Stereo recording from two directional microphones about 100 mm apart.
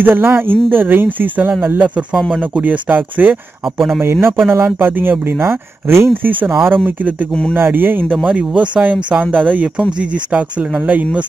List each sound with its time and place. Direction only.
0.0 s speech: 20° right (ahead or behind)